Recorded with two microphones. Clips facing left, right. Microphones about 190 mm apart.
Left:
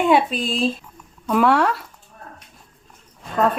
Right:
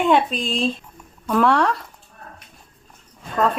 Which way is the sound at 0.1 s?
5° left (ahead or behind).